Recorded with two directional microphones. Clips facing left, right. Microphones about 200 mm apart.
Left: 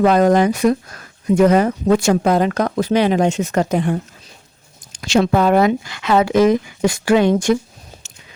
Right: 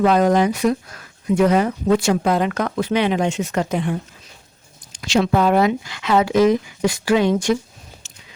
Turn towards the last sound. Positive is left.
turn(degrees=50)  # may be behind; listen again after turning